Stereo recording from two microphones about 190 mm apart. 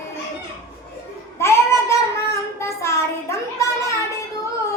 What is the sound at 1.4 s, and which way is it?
Child singing, 15° left (ahead or behind).